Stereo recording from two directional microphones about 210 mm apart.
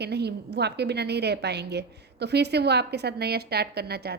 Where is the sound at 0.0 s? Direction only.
50° right (ahead or behind).